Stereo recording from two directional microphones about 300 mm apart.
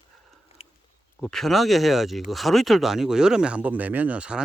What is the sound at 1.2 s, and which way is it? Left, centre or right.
Speech, centre.